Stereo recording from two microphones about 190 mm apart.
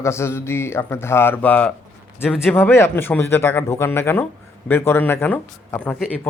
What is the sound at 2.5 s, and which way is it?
A man's voice, 10° left (ahead or behind).